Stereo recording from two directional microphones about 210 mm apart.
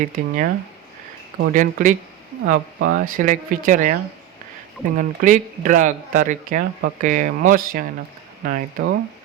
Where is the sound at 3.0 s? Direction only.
40° right (ahead or behind).